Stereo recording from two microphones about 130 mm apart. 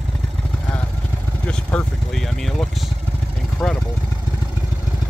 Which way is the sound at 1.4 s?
5° left (ahead or behind).